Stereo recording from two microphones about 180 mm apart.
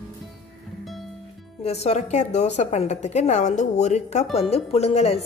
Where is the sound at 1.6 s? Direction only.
35° left (ahead or behind).